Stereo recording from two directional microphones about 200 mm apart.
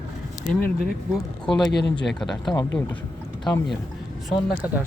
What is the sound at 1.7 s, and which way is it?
Speech, 55° left (ahead or behind).